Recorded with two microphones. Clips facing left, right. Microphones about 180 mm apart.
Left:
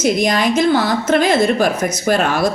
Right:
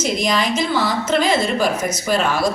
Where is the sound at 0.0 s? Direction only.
50° left (ahead or behind).